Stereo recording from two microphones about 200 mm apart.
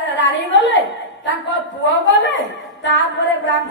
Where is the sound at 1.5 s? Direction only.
65° left (ahead or behind).